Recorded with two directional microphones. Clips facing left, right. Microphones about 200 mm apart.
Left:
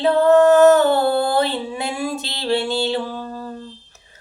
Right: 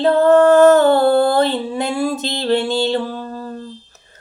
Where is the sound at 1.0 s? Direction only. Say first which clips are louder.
Right 5 dB; 45° right (ahead or behind).